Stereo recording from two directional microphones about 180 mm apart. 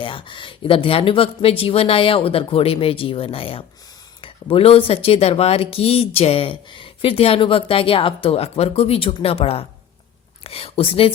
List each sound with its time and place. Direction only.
0.0 s speech: 30° left (ahead or behind)